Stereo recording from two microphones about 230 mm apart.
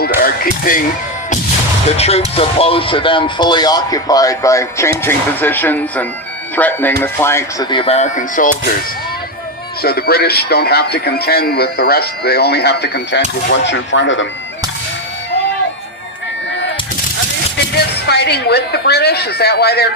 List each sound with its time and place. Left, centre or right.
0.2 s a sound: left
2.0 s speech: left
9.8 s a man's voice: left
17.7 s speech: left